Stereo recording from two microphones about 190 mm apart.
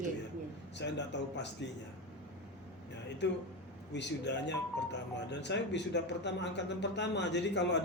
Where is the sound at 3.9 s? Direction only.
65° left (ahead or behind).